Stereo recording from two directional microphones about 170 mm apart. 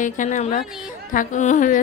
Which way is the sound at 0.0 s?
45° left (ahead or behind).